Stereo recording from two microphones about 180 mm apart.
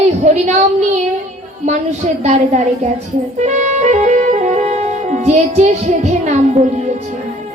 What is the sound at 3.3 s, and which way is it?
Music, 40° right (ahead or behind).